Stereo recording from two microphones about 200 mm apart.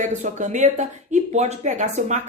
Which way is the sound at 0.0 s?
35° right (ahead or behind).